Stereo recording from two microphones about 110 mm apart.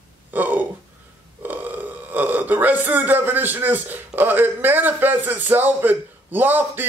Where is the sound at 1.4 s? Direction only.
15° right (ahead or behind).